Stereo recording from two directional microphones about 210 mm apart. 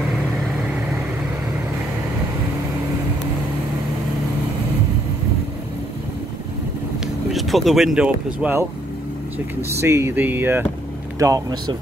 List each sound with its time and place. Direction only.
7.2 s speech: centre (ahead or behind); by 11.7 s 15° right (ahead or behind)